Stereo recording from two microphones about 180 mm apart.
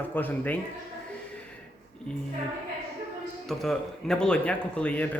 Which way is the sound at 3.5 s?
Centre (ahead or behind).